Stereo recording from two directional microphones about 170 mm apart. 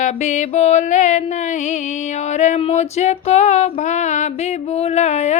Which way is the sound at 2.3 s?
45° left (ahead or behind).